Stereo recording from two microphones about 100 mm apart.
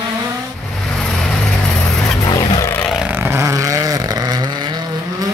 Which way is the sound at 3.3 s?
30° right (ahead or behind).